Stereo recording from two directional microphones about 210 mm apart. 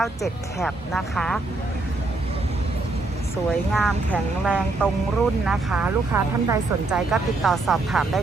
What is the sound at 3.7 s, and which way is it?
Speech, centre (ahead or behind).